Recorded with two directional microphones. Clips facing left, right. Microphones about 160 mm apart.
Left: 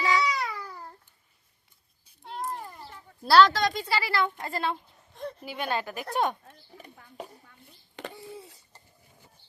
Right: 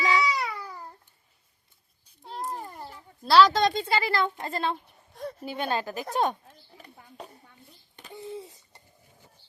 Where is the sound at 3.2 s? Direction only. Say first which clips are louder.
Even; centre (ahead or behind).